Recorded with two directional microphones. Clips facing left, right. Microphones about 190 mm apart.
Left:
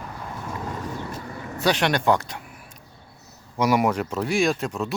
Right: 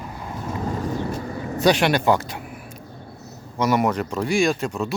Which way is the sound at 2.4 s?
55° right (ahead or behind).